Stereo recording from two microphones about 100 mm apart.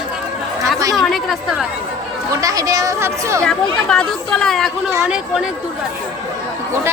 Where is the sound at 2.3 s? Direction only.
35° right (ahead or behind).